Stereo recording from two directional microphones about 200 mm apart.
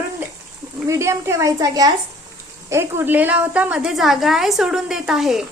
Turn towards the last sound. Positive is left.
turn(degrees=0)  # may be behind; listen again after turning